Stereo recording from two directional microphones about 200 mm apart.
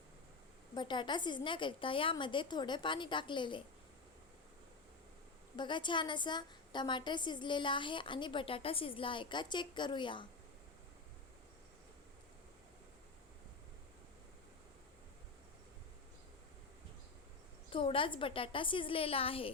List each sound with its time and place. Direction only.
0.7 s a woman's voice: 20° left (ahead or behind)
5.5 s a woman's voice: 25° left (ahead or behind)
17.7 s a woman's voice: 25° left (ahead or behind)